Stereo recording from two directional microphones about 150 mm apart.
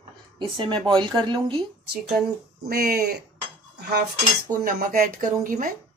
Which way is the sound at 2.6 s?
85° right.